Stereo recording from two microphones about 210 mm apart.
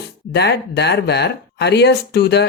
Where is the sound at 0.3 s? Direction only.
50° left (ahead or behind).